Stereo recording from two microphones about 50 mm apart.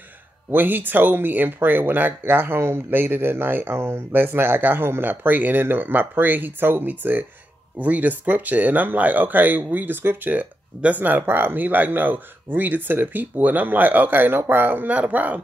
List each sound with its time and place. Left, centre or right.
0.5 s speech: right
2.9 s speech: right
3.7 s speech: right
4.1 s speech: right
15.0 s speech: right